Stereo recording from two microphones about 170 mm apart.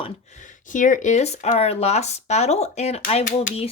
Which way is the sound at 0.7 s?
50° left (ahead or behind).